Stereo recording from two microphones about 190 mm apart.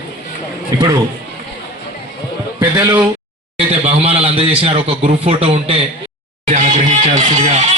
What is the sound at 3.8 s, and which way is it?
A man's voice, 30° right (ahead or behind).